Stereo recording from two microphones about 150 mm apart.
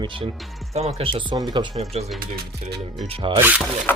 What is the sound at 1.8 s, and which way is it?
Speech, 45° right (ahead or behind).